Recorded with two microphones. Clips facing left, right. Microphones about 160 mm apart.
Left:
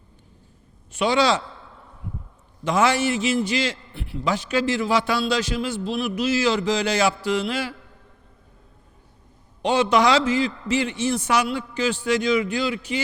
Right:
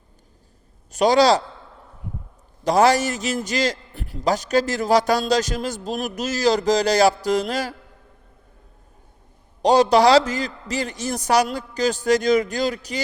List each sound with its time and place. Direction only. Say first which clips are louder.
0.9 s a man's voice: right 4 dB; 40° right (ahead or behind)
2.6 s a man's voice: right 3 dB; 40° right (ahead or behind)
9.6 s a man's voice: right 4 dB; 40° right (ahead or behind)